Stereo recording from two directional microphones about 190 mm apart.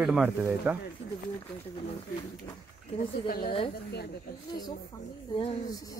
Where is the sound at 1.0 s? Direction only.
70° left (ahead or behind).